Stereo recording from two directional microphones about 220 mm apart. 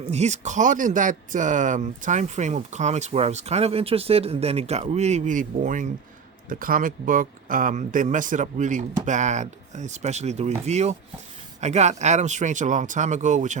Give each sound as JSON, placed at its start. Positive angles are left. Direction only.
{"t": 0.1, "sound": "speech", "side_deg": -30}